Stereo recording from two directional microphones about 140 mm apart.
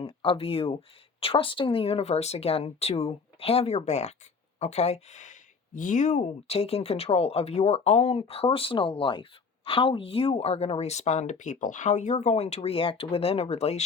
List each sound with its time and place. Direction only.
0.0 s speech: 40° left (ahead or behind)